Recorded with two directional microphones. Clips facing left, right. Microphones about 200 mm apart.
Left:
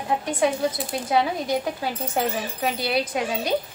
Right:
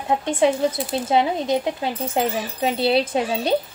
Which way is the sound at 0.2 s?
25° right (ahead or behind).